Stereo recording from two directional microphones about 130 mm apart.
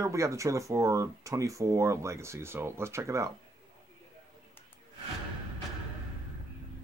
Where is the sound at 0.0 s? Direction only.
25° right (ahead or behind).